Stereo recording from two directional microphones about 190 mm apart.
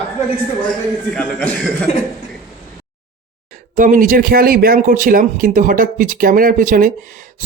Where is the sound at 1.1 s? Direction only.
5° left (ahead or behind).